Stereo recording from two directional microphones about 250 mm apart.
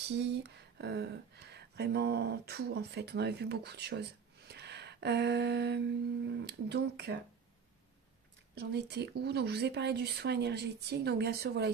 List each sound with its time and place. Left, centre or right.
0.2 s speech: right
8.5 s speech: right